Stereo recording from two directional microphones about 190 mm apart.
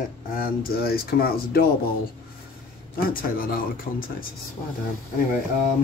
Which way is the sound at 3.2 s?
50° left (ahead or behind).